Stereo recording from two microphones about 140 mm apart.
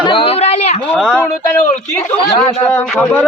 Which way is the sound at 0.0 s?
40° left (ahead or behind).